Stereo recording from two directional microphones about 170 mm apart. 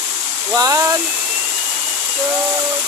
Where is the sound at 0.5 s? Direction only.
20° right (ahead or behind).